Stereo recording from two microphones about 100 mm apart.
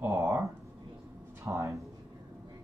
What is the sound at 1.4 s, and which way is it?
Speech, 30° right (ahead or behind).